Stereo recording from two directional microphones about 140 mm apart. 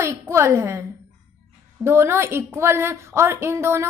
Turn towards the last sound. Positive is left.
turn(degrees=-20)  # may be behind; listen again after turning